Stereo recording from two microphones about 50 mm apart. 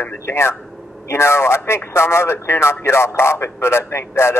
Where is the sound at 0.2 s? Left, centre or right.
Left.